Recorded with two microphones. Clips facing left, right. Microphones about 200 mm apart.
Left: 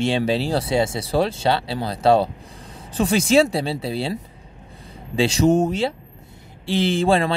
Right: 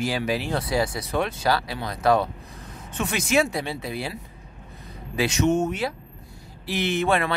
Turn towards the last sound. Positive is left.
turn(degrees=30)  # may be behind; listen again after turning